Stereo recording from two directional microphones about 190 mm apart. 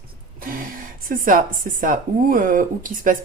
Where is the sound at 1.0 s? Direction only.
45° right (ahead or behind).